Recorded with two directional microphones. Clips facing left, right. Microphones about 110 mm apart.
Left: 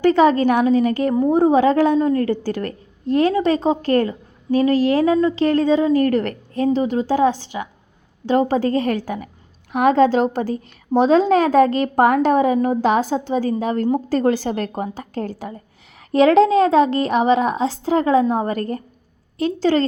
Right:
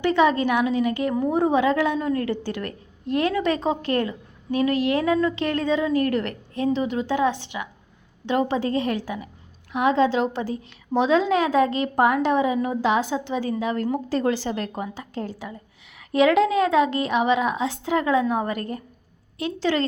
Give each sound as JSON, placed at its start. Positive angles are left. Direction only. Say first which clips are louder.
{"t": 0.0, "sound": "a woman's voice", "louder": "left 5 dB", "side_deg": 40}
{"t": 16.0, "sound": "a woman's voice", "louder": "left 5 dB", "side_deg": 35}